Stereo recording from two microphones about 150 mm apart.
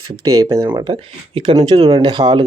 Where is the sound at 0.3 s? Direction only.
30° right (ahead or behind).